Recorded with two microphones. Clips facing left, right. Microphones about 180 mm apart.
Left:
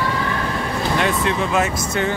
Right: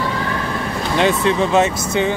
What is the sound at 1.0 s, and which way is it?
Speech, 30° right (ahead or behind).